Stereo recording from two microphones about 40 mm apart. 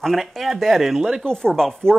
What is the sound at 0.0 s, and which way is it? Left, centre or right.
Speech, centre.